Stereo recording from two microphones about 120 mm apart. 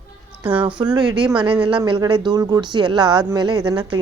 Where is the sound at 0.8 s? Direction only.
5° right (ahead or behind).